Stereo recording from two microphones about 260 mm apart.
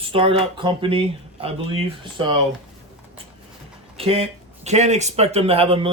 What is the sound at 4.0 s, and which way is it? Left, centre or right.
Speech, right.